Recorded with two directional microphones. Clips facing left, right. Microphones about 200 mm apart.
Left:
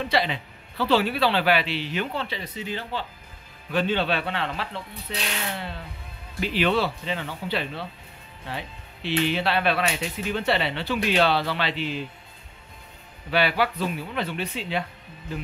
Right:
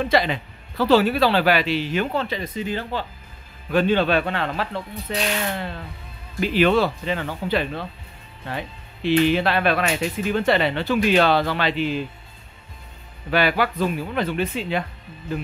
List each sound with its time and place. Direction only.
0.0 s speech: 50° right (ahead or behind)
13.3 s speech: 50° right (ahead or behind)